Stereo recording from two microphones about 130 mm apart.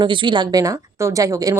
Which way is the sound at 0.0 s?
40° right (ahead or behind).